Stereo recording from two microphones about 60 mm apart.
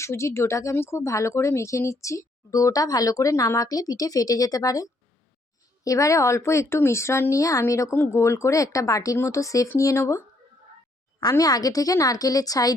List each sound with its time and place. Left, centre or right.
0.0 s a woman's voice: left
5.8 s a woman's voice: left
7.9 s speech: left
9.1 s speech: left
11.3 s a woman's voice: left